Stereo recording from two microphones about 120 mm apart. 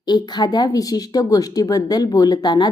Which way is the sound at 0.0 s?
35° left (ahead or behind).